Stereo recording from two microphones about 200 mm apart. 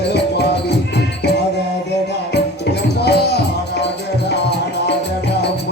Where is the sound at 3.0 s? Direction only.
55° left (ahead or behind).